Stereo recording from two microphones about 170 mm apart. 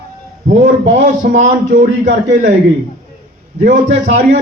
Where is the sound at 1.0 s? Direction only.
45° right (ahead or behind).